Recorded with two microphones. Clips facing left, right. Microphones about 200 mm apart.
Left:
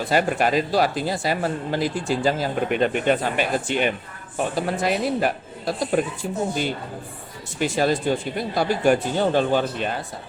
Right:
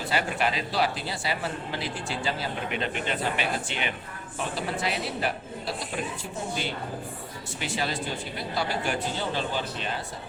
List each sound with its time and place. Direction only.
0.1 s speech: 45° left (ahead or behind)
7.6 s speech: 45° left (ahead or behind)